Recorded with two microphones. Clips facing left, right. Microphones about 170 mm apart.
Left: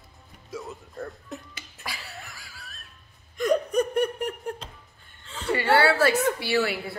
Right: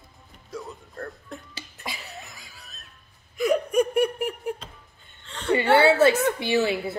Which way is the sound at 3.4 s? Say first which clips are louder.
Right 1 dB; 10° right (ahead or behind).